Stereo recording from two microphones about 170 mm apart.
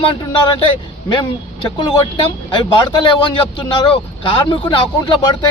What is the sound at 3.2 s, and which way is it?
Speech, 30° left (ahead or behind).